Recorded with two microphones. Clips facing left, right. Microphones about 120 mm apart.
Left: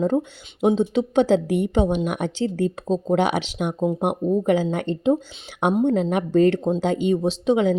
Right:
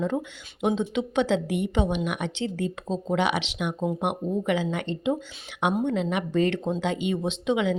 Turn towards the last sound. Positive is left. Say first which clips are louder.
# left 5 dB
turn(degrees=40)  # may be behind; listen again after turning